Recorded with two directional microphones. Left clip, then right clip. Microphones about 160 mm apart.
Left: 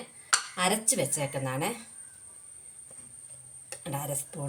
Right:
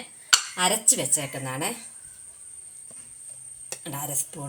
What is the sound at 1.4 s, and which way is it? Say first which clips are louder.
Speech: right 1 dB; 25° right (ahead or behind).